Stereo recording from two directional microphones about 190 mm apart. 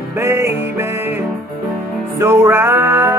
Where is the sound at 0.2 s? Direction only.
15° right (ahead or behind).